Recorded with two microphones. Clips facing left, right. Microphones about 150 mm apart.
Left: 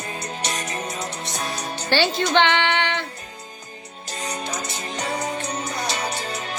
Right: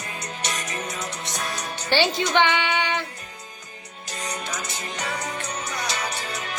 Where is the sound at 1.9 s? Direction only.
15° right (ahead or behind).